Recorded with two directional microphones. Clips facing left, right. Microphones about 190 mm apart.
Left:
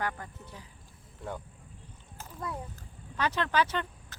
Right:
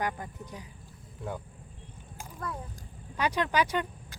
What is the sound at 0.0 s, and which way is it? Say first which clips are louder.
Speech: right 2 dB; 15° right (ahead or behind).